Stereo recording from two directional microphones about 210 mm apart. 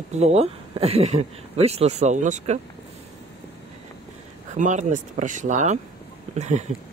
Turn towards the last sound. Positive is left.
turn(degrees=-35)  # may be behind; listen again after turning